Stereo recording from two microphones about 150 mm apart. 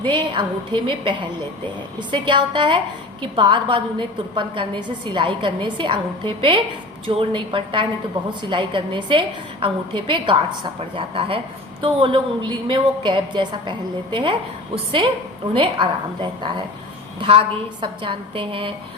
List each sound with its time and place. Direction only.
0.0 s a woman's voice: 30° right (ahead or behind)
15.5 s a woman's voice: 35° right (ahead or behind)
17.2 s a woman's voice: 40° right (ahead or behind)